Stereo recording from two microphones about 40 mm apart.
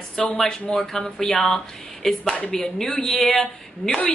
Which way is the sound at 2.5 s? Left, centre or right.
Left.